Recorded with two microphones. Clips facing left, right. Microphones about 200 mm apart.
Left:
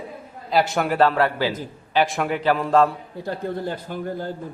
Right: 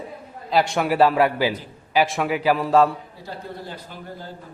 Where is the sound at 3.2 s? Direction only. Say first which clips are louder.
Left 8 dB; 55° left (ahead or behind).